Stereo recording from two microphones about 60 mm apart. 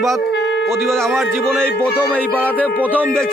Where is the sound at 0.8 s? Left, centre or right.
Centre.